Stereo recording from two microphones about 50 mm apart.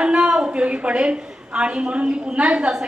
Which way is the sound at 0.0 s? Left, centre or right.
Centre.